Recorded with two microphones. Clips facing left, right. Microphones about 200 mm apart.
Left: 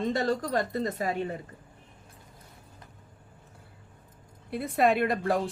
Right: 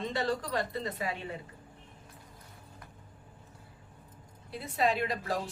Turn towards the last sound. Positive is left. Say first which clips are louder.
# left 7 dB
turn(degrees=55)  # may be behind; listen again after turning